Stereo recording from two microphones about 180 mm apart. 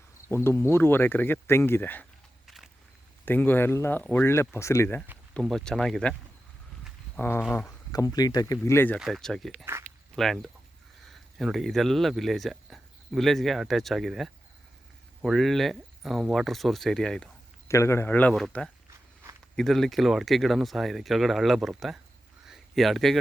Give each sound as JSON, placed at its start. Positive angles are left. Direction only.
{"t": 0.3, "sound": "speech", "side_deg": 15}
{"t": 3.2, "sound": "speech", "side_deg": 10}
{"t": 5.3, "sound": "speech", "side_deg": 0}
{"t": 7.2, "sound": "speech", "side_deg": 10}
{"t": 9.0, "sound": "speech", "side_deg": 0}
{"t": 17.7, "sound": "speech", "side_deg": 15}
{"t": 18.9, "sound": "walk", "side_deg": -15}
{"t": 19.5, "sound": "speech", "side_deg": 0}
{"t": 22.4, "sound": "a sound", "side_deg": 0}